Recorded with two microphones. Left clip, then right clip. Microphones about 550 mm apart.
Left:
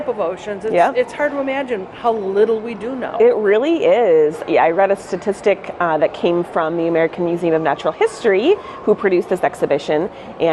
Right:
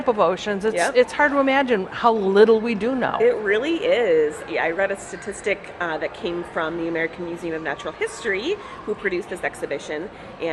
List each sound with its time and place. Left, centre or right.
0.2 s speech: right
3.2 s speech: left